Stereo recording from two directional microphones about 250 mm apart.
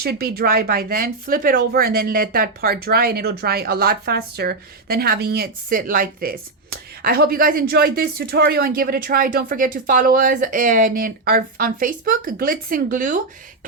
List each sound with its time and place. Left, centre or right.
0.0 s speech: right